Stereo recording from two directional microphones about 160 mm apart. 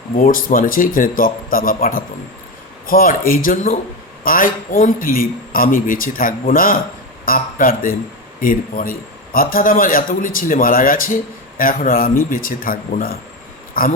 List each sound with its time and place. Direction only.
0.1 s a man's voice: 60° left (ahead or behind)